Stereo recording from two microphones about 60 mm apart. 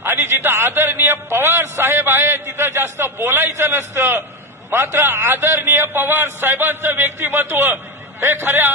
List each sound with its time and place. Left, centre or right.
0.0 s a man's voice: right